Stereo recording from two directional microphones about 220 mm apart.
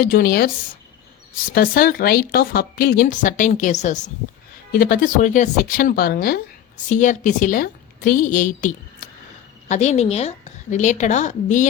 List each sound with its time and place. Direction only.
0.0 s a woman's voice: 45° left (ahead or behind)